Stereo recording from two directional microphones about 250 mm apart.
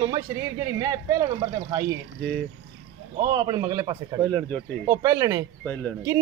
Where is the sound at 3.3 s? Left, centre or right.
Centre.